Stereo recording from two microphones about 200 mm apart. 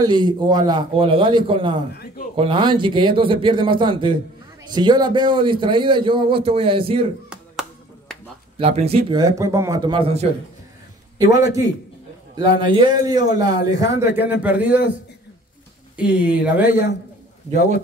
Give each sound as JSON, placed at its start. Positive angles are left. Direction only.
{"t": 0.0, "sound": "a man's voice", "side_deg": -20}
{"t": 8.5, "sound": "a man's voice", "side_deg": -30}
{"t": 9.2, "sound": "a man's voice", "side_deg": -15}
{"t": 16.0, "sound": "a man's voice", "side_deg": -5}